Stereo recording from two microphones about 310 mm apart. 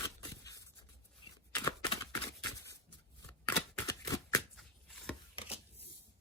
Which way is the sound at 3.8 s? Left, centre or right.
Centre.